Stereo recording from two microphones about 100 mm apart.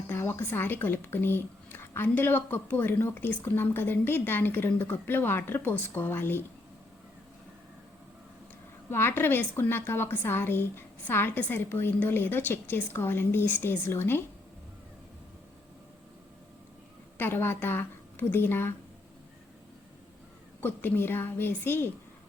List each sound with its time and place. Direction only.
0.1 s a woman's voice: 25° left (ahead or behind)
8.9 s a woman's voice: 25° left (ahead or behind)
17.2 s a woman's voice: 20° left (ahead or behind)
20.6 s a woman's voice: 20° left (ahead or behind)